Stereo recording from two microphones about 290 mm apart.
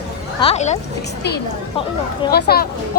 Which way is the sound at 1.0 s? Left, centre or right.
Left.